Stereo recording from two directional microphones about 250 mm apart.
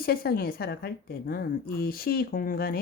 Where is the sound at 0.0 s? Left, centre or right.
Left.